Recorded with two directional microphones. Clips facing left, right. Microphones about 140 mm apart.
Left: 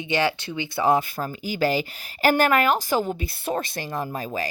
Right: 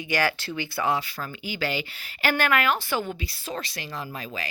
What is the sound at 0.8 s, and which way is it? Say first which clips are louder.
A woman's voice: left 7 dB; 45° left (ahead or behind).